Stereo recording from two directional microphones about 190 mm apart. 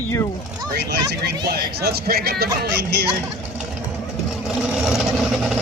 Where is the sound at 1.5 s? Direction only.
55° right (ahead or behind).